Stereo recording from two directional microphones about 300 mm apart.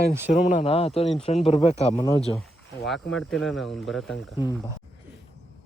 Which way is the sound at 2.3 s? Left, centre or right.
Centre.